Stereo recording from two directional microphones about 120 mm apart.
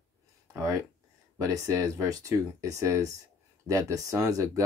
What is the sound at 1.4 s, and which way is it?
Speech, 30° right (ahead or behind).